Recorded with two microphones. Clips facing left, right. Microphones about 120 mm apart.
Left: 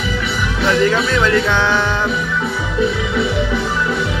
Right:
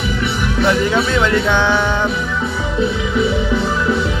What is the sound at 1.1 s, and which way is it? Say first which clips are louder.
Speech: even; 20° right (ahead or behind).